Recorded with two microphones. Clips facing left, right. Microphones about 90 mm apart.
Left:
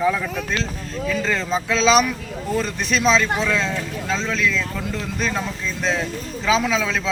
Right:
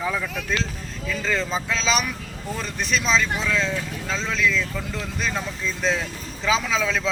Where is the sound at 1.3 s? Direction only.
Centre (ahead or behind).